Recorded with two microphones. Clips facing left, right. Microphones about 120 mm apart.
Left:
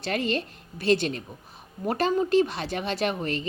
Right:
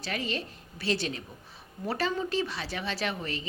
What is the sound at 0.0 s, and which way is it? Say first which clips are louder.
A woman's voice: left 6 dB; 60° left (ahead or behind).